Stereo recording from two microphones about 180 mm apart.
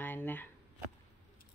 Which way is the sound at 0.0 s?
10° left (ahead or behind).